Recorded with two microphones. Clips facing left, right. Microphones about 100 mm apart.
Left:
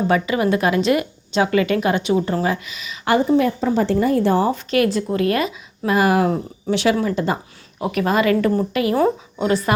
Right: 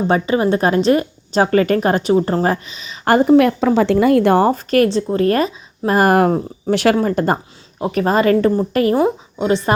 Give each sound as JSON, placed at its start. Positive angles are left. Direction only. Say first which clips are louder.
{"t": 0.1, "sound": "a woman's voice", "louder": "right 4 dB", "side_deg": -30}
{"t": 3.0, "sound": "a woman's voice", "louder": "right 4 dB", "side_deg": -45}
{"t": 3.3, "sound": "a woman's voice", "louder": "right 5 dB", "side_deg": -70}
{"t": 4.5, "sound": "speech", "louder": "right 4 dB", "side_deg": -40}
{"t": 7.8, "sound": "a woman's voice", "louder": "right 3 dB", "side_deg": -35}
{"t": 9.0, "sound": "a woman's voice", "louder": "right 2 dB", "side_deg": -20}